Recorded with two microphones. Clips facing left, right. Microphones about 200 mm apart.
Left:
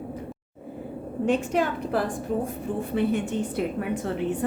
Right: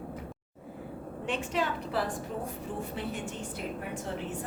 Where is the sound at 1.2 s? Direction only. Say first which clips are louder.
Left 8 dB; 45° left (ahead or behind).